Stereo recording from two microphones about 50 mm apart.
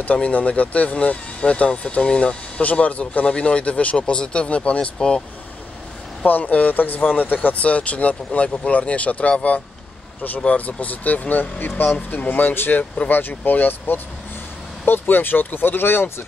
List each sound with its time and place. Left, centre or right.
0.0 s speech: left
6.2 s speech: left
10.4 s speech: left